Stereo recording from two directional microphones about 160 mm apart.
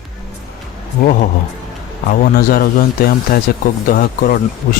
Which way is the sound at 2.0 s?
60° left (ahead or behind).